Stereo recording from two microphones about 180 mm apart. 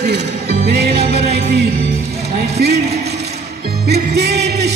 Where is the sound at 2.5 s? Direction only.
65° right (ahead or behind).